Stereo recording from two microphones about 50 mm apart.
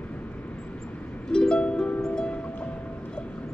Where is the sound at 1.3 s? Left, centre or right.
Centre.